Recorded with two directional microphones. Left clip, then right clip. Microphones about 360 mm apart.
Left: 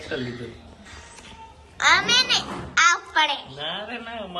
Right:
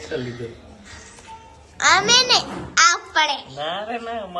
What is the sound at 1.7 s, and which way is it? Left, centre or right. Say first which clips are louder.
A child's voice: right 3 dB; centre.